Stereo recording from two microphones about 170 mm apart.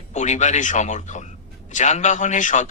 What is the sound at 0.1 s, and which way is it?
A man's voice, 45° left (ahead or behind).